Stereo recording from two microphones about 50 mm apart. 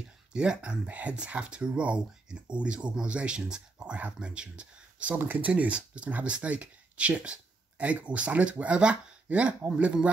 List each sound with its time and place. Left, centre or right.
0.3 s speech: centre
5.2 s speech: right
5.5 s speech: right